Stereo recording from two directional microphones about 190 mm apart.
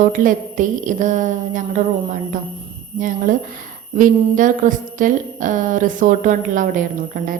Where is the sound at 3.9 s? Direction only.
45° right (ahead or behind).